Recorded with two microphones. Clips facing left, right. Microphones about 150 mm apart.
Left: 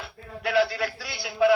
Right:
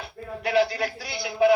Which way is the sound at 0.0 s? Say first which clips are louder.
Right 2 dB; 20° right (ahead or behind).